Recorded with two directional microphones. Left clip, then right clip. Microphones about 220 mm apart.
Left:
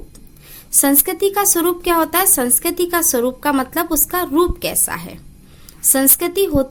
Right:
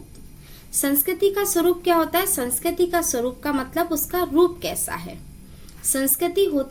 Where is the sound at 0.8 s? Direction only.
45° left (ahead or behind).